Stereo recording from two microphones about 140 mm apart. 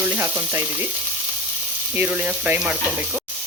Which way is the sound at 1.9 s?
10° right (ahead or behind).